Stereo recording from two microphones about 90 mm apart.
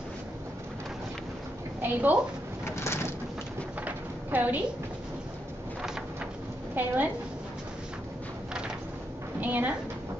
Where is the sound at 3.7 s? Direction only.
20° right (ahead or behind).